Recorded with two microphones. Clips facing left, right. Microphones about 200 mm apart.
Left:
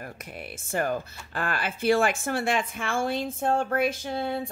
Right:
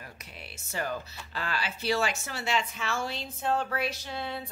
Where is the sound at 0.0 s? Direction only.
50° left (ahead or behind).